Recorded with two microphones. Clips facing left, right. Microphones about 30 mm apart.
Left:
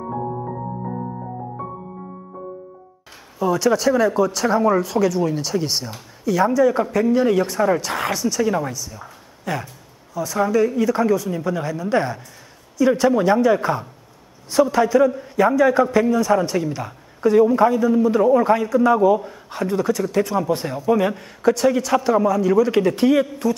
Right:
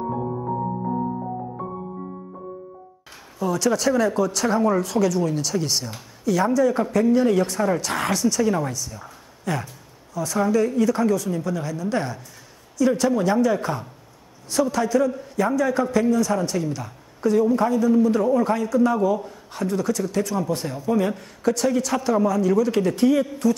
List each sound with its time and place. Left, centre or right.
3.3 s a man's voice: centre
22.9 s speech: left
23.4 s a man's voice: left